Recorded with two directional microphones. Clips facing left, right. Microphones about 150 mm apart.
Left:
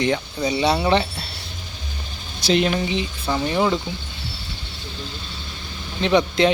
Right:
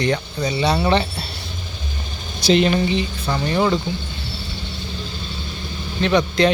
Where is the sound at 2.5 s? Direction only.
5° left (ahead or behind).